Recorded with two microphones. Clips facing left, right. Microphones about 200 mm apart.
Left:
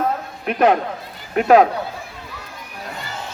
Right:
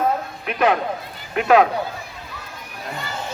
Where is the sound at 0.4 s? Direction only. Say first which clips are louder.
Left 3 dB; 45° left (ahead or behind).